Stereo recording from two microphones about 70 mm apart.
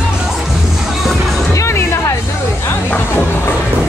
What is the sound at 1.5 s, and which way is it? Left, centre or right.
Music, left.